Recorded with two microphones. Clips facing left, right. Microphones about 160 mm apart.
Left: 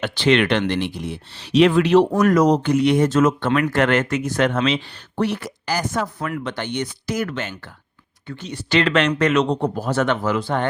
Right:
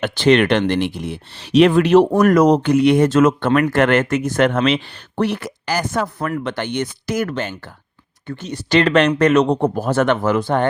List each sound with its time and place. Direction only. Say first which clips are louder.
0.0 s speech: right 4 dB; 45° right (ahead or behind)